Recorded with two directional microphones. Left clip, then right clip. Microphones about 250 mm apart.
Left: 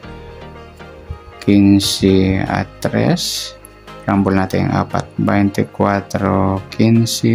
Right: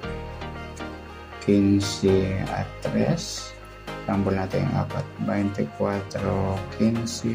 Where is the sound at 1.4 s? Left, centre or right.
Left.